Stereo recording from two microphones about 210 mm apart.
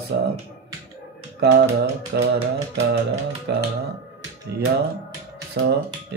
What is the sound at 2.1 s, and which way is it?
Speech, 50° right (ahead or behind).